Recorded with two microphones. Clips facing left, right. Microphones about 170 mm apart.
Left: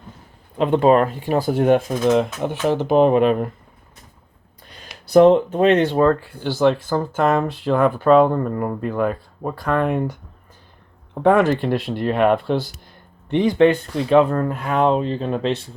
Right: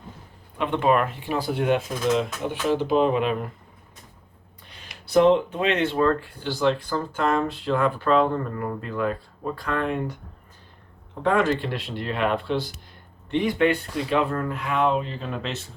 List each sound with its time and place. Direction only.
0.6 s speech: 35° left (ahead or behind)
4.7 s speech: 40° left (ahead or behind)
11.1 s speech: 50° left (ahead or behind)
13.6 s speech: 40° left (ahead or behind)